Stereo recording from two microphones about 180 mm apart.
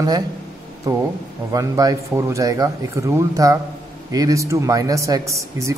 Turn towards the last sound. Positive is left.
turn(degrees=-15)  # may be behind; listen again after turning